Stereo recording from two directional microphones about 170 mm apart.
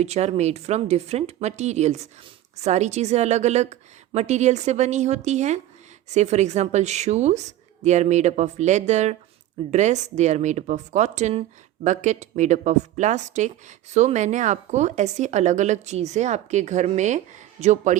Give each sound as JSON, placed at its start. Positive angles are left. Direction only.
{"t": 0.0, "sound": "a woman's voice", "side_deg": -40}